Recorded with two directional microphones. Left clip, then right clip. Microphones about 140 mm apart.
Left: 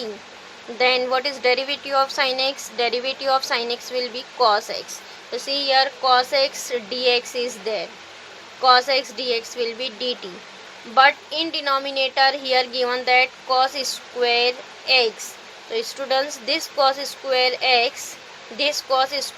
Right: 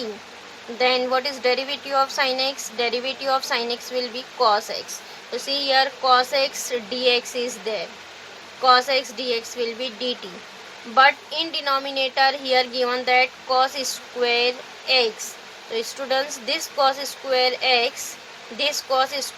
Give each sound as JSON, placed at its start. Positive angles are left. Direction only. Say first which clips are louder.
{"t": 0.8, "sound": "a woman's voice", "louder": "left 1 dB", "side_deg": 40}